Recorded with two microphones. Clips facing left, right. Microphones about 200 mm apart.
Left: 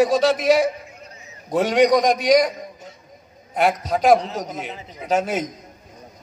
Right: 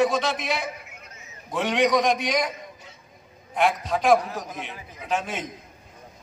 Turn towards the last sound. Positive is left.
turn(degrees=40)  # may be behind; listen again after turning